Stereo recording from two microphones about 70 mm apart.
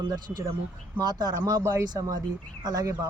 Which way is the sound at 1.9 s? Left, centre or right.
Right.